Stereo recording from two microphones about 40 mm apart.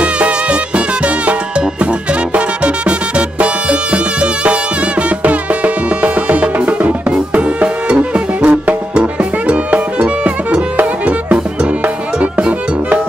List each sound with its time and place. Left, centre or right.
0.0 s music: right